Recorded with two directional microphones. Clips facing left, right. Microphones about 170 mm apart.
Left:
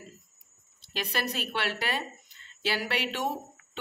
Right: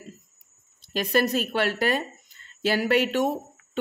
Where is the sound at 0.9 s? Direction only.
45° right (ahead or behind).